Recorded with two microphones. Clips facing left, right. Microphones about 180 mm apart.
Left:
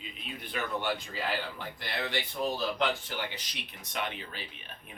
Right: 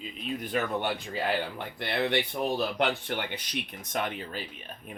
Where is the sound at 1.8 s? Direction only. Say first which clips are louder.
Right 8 dB; 60° right (ahead or behind).